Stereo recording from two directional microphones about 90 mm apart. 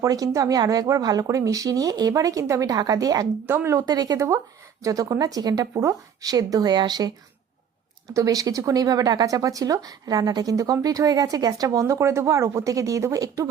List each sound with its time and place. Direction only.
0.0 s speech: 40° right (ahead or behind)
3.4 s speech: 25° right (ahead or behind)
3.8 s speech: 45° right (ahead or behind)
8.0 s speech: 40° right (ahead or behind)